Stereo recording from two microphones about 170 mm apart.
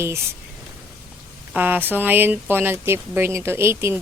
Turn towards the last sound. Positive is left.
turn(degrees=-15)  # may be behind; listen again after turning